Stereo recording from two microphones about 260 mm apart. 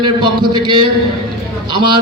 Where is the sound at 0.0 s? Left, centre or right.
Centre.